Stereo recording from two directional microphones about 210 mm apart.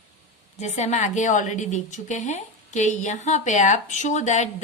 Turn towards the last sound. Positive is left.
turn(degrees=35)  # may be behind; listen again after turning